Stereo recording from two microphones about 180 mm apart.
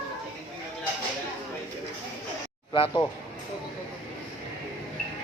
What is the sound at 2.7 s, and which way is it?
Speech, 25° left (ahead or behind).